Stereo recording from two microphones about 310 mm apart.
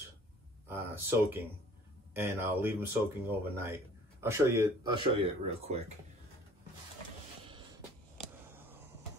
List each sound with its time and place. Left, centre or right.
0.7 s speech: centre